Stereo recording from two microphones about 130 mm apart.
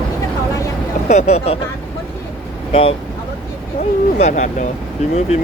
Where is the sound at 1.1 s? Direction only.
60° left (ahead or behind).